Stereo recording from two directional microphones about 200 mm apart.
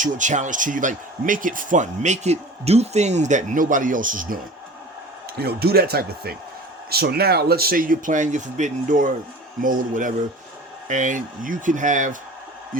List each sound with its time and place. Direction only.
0.0 s speech: 40° right (ahead or behind)
5.4 s speech: 50° right (ahead or behind)